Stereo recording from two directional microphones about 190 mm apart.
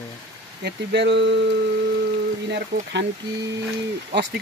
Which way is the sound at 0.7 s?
65° right (ahead or behind).